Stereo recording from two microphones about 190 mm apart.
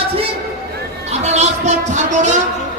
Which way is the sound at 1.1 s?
35° right (ahead or behind).